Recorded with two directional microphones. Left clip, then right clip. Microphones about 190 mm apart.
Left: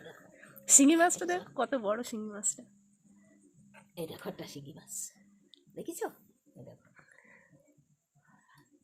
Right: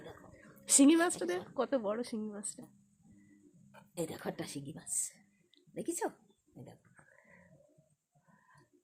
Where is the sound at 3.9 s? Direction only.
45° right (ahead or behind).